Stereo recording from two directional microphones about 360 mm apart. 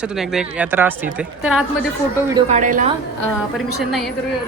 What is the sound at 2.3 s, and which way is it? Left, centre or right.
Speech, centre.